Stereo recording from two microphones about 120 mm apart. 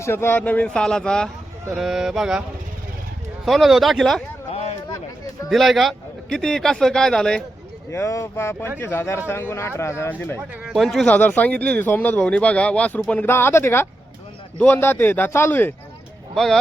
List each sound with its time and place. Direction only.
0.0 s a man's voice: 20° left (ahead or behind); by 2.4 s 5° right (ahead or behind)
3.4 s a man's voice: centre (ahead or behind)
4.5 s a sound: 60° left (ahead or behind)
4.9 s a sound: 30° left (ahead or behind)
5.5 s a man's voice: centre (ahead or behind)
7.9 s speech: 25° left (ahead or behind)
10.6 s speech: centre (ahead or behind); by 15.7 s 15° left (ahead or behind)
16.3 s speech: 5° left (ahead or behind)